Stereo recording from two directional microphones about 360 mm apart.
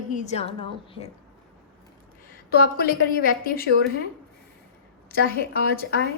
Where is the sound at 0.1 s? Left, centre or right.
Centre.